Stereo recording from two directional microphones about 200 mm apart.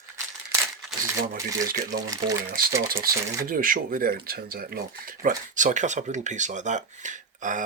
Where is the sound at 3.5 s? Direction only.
45° right (ahead or behind).